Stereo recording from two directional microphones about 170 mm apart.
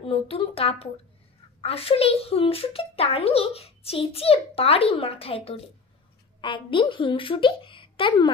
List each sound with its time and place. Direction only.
0.0 s a child's voice: 35° left (ahead or behind)